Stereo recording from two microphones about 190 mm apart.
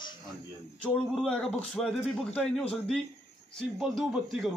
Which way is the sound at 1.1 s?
Centre (ahead or behind).